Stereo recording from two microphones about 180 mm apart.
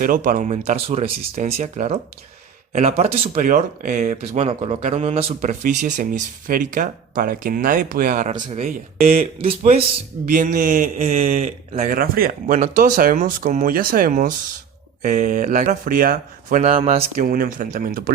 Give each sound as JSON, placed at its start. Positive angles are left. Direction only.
{"t": 0.0, "sound": "speech", "side_deg": -50}
{"t": 10.2, "sound": "speech", "side_deg": -45}
{"t": 11.2, "sound": "speech", "side_deg": -35}
{"t": 11.9, "sound": "speech", "side_deg": -55}
{"t": 17.2, "sound": "speech", "side_deg": -55}